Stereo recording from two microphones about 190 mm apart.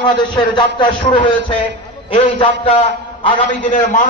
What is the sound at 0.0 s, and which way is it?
Speech, 25° left (ahead or behind).